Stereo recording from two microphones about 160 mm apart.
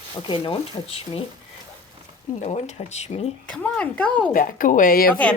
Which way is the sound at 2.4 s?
40° left (ahead or behind).